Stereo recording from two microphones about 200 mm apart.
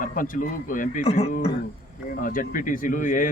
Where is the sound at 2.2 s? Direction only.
45° left (ahead or behind).